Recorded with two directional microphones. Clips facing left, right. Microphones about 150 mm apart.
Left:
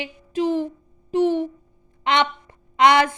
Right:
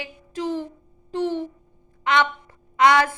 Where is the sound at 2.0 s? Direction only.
20° left (ahead or behind).